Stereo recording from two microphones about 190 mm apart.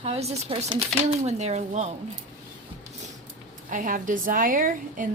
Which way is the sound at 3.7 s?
45° right (ahead or behind).